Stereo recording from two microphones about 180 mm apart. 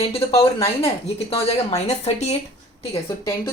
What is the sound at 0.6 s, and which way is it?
A woman's voice, 35° left (ahead or behind).